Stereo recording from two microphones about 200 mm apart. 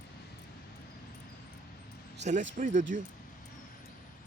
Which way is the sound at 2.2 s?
35° right (ahead or behind).